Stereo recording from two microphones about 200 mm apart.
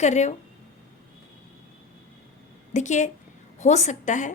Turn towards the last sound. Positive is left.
turn(degrees=40)  # may be behind; listen again after turning